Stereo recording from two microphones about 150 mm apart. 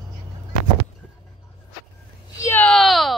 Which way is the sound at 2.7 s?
Centre (ahead or behind).